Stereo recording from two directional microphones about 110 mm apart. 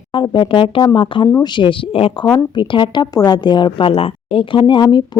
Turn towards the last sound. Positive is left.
turn(degrees=45)  # may be behind; listen again after turning